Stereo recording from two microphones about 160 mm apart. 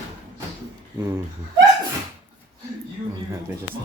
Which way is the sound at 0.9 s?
15° right (ahead or behind).